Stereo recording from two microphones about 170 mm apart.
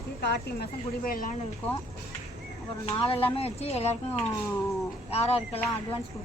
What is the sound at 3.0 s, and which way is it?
Speech, 30° left (ahead or behind).